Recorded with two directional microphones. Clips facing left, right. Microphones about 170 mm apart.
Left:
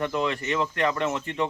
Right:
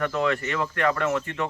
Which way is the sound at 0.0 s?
20° left (ahead or behind).